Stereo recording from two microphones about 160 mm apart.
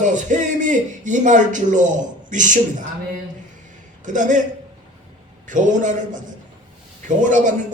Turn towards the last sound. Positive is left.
turn(degrees=-50)  # may be behind; listen again after turning